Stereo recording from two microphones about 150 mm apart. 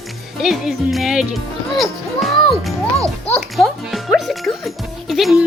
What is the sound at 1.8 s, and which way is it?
Music, centre (ahead or behind).